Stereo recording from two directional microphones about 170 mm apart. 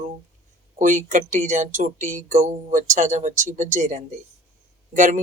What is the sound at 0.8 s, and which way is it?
Speech, 50° right (ahead or behind).